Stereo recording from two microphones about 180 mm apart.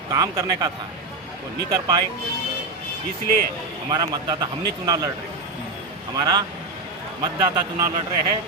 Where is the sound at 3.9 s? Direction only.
20° right (ahead or behind).